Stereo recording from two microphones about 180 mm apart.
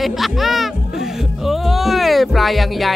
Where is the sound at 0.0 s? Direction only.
Centre (ahead or behind).